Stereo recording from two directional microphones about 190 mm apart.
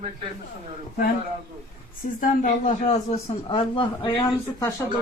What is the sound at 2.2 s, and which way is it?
A man's voice, 40° left (ahead or behind).